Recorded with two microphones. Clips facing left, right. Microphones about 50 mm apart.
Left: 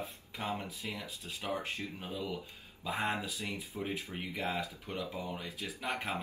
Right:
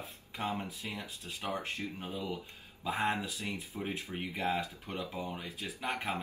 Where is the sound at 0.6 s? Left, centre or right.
Right.